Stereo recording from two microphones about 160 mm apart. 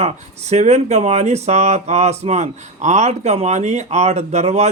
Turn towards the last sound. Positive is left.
turn(degrees=-45)  # may be behind; listen again after turning